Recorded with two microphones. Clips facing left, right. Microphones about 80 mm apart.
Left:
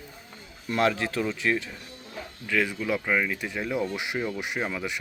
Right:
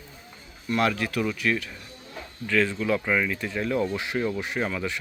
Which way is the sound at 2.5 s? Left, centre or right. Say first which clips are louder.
Right 3 dB; centre.